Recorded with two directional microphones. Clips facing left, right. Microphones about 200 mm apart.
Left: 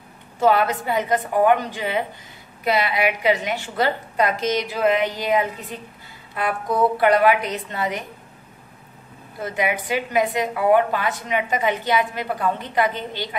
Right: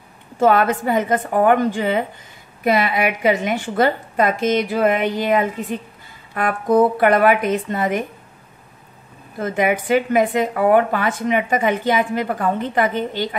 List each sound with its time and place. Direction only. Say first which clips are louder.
0.4 s a woman's voice: right 3 dB; 50° right (ahead or behind)
9.4 s a woman's voice: right 5 dB; 50° right (ahead or behind)